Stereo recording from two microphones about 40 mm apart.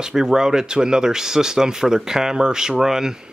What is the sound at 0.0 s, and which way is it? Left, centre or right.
Speech, centre.